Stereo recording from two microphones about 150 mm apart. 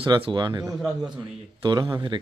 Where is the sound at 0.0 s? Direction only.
35° right (ahead or behind).